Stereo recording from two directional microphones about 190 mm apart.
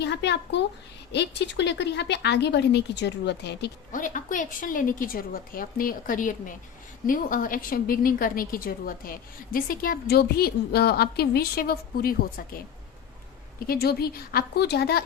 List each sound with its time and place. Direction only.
0.0 s speech: 65° left (ahead or behind)
3.9 s a woman's voice: 45° left (ahead or behind)
13.7 s speech: 55° left (ahead or behind)